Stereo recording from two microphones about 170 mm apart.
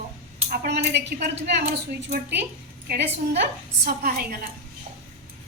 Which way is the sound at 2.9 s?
75° right (ahead or behind).